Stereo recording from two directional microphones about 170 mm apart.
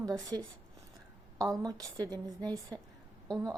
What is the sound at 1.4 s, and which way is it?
A woman's voice, 20° right (ahead or behind).